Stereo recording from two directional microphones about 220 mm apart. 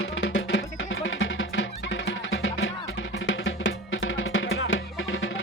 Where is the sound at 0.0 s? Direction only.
60° left (ahead or behind).